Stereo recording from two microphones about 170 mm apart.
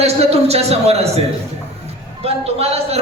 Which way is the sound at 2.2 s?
40° right (ahead or behind).